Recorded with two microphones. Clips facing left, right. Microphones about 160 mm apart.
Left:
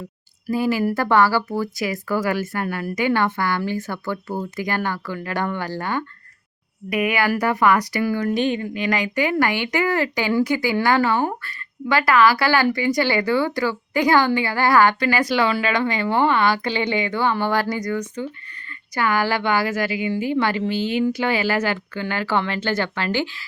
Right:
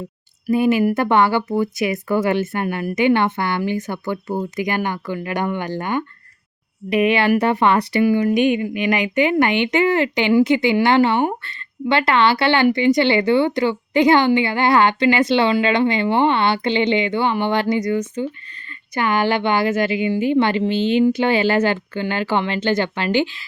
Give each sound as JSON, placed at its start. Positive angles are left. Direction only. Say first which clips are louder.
{"t": 0.4, "sound": "speech", "louder": "right 4 dB", "side_deg": -20}